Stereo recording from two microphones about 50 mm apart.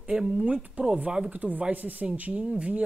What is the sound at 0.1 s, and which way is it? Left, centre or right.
Speech, centre.